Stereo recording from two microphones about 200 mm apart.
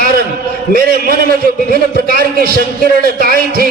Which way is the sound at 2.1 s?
50° right (ahead or behind).